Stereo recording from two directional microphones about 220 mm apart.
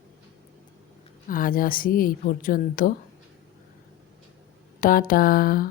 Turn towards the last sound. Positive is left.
turn(degrees=40)  # may be behind; listen again after turning